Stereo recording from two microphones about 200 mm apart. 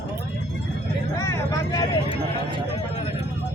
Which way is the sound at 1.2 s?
15° left (ahead or behind).